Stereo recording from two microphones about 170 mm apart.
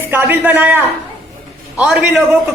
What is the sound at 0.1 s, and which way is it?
A man's voice, 10° right (ahead or behind).